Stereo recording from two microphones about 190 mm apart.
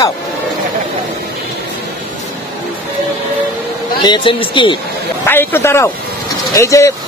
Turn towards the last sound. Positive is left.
turn(degrees=15)  # may be behind; listen again after turning